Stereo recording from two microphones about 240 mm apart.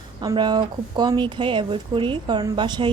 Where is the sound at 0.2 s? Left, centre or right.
Centre.